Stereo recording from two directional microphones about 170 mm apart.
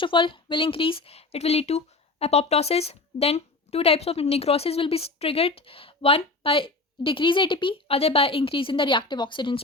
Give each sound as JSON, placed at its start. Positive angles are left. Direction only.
{"t": 0.0, "sound": "speech", "side_deg": 30}